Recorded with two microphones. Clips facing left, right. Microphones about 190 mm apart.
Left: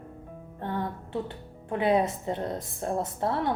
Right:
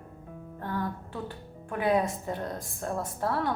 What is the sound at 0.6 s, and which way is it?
Music, 25° left (ahead or behind).